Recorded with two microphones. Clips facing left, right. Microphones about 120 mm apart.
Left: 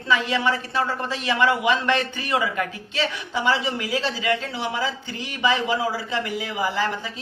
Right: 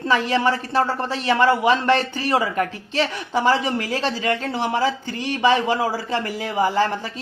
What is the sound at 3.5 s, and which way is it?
Speech, 50° right (ahead or behind).